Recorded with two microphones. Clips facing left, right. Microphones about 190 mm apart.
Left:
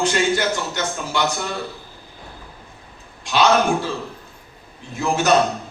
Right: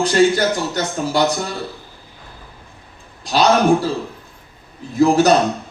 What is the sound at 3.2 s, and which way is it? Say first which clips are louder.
Speech: right 2 dB; 35° right (ahead or behind).